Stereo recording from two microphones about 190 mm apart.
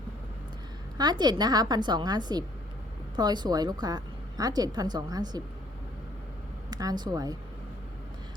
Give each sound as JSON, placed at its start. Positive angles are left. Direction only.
{"t": 0.9, "sound": "a woman's voice", "side_deg": -20}
{"t": 6.7, "sound": "a woman's voice", "side_deg": -20}